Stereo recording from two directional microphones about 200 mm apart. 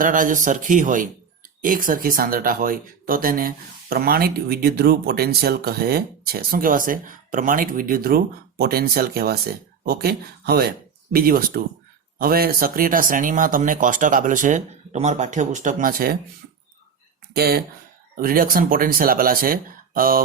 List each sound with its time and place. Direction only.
0.0 s speech: 40° right (ahead or behind)
17.3 s speech: 50° right (ahead or behind)